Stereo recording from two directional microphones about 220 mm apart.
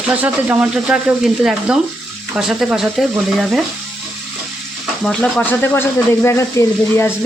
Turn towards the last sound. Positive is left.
turn(degrees=10)  # may be behind; listen again after turning